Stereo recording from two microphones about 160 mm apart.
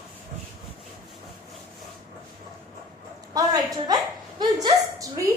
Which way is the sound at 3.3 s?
25° right (ahead or behind).